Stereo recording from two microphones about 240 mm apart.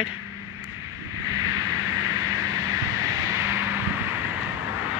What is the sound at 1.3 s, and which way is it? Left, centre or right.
Vehicle, centre.